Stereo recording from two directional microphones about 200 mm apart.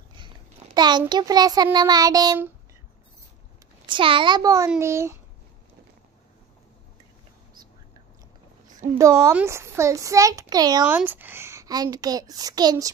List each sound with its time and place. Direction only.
0.7 s child singing: 20° right (ahead or behind)
3.8 s child singing: 25° right (ahead or behind)
8.9 s a child's voice: 15° right (ahead or behind)
10.9 s a child's voice: 10° right (ahead or behind)